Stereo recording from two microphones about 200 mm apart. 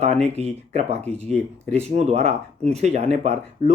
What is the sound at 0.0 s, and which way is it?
Speech, 30° right (ahead or behind).